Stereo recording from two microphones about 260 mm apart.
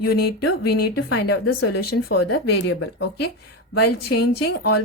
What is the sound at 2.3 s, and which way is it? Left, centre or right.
Speech, left.